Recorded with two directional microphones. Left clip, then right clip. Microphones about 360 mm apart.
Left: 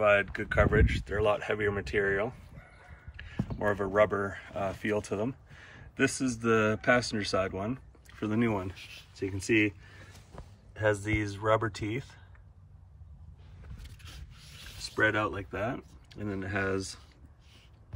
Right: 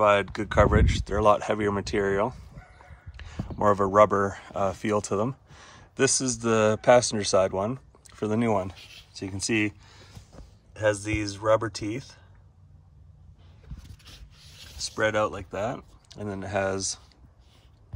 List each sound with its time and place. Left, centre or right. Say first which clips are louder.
0.0 s speech: right 4 dB; centre
3.2 s a sound: even; centre
3.5 s speech: right 7 dB; centre
11.4 s speech: right 5 dB; centre
11.9 s speech: right 2 dB; right
14.8 s speech: right 3 dB; centre